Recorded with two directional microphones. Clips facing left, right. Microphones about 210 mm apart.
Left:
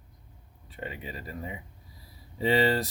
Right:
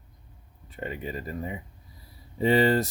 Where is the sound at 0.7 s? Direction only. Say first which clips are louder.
Right 5 dB; 45° right (ahead or behind).